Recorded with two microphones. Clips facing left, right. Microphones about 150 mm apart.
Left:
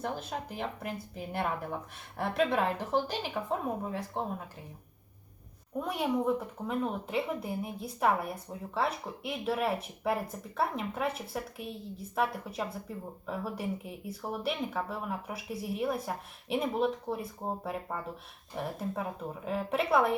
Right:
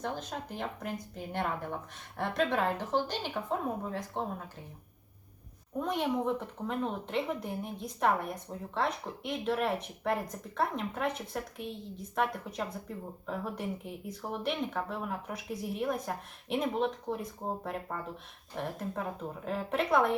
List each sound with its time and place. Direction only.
0.0 s speech: 5° left (ahead or behind)
5.8 s speech: 5° left (ahead or behind)